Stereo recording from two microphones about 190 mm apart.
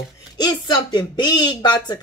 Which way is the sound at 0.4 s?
20° left (ahead or behind).